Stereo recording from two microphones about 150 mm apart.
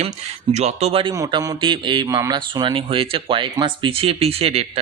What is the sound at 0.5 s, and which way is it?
Speech, 45° right (ahead or behind).